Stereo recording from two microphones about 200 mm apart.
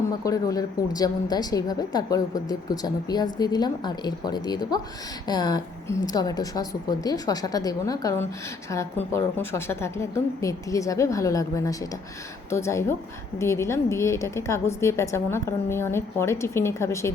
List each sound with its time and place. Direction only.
0.3 s a woman's voice: 15° left (ahead or behind)